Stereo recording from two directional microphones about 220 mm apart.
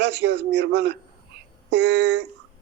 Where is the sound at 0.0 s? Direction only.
50° right (ahead or behind).